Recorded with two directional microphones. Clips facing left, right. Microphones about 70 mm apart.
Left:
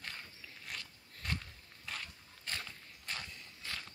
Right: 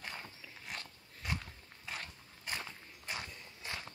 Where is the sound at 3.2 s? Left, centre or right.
Centre.